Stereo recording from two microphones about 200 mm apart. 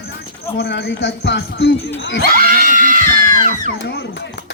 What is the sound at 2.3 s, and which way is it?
Screaming, 45° right (ahead or behind).